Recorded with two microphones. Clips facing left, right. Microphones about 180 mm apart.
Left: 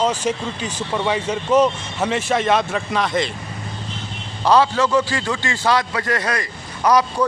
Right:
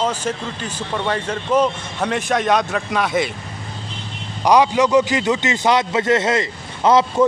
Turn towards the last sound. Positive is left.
turn(degrees=-25)  # may be behind; listen again after turning